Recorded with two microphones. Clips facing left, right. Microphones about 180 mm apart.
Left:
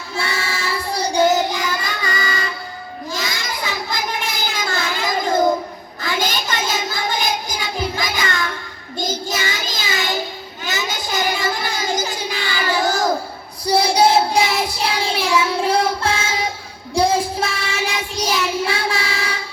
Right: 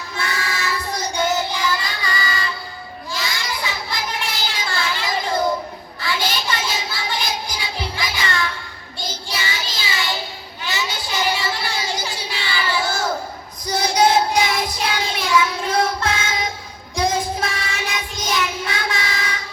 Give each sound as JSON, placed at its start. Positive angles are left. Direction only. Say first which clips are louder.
{"t": 0.2, "sound": "child singing", "louder": "left 1 dB", "side_deg": 30}
{"t": 3.1, "sound": "a sound", "louder": "left 1 dB", "side_deg": 45}
{"t": 6.0, "sound": "child singing", "louder": "left 2 dB", "side_deg": 45}
{"t": 10.6, "sound": "a sound", "louder": "left 1 dB", "side_deg": 45}
{"t": 13.7, "sound": "child singing", "louder": "left 3 dB", "side_deg": 30}
{"t": 16.9, "sound": "music", "louder": "left 4 dB", "side_deg": 30}
{"t": 17.4, "sound": "child singing", "louder": "left 3 dB", "side_deg": 30}